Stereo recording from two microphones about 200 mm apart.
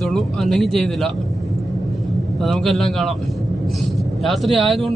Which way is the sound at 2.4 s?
Centre (ahead or behind).